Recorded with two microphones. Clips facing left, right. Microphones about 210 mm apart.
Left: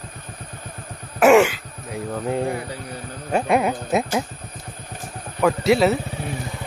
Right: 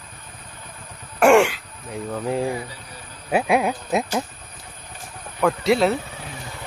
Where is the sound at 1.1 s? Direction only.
Centre (ahead or behind).